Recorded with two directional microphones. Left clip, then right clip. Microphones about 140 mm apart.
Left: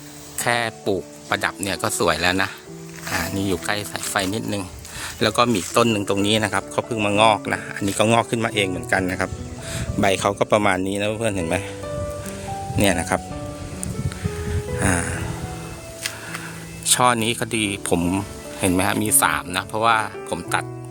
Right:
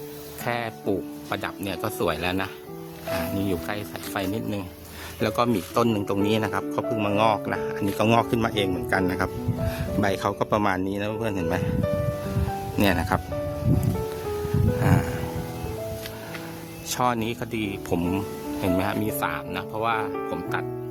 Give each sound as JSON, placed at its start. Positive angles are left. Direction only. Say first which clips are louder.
{"t": 0.4, "sound": "speech", "louder": "left 6 dB", "side_deg": 25}
{"t": 6.9, "sound": "speech", "louder": "left 6 dB", "side_deg": 5}
{"t": 9.7, "sound": "speech", "louder": "left 6 dB", "side_deg": 10}
{"t": 12.8, "sound": "speech", "louder": "left 3 dB", "side_deg": 0}
{"t": 14.8, "sound": "music", "louder": "left 5 dB", "side_deg": 15}
{"t": 16.8, "sound": "speech", "louder": "left 7 dB", "side_deg": 25}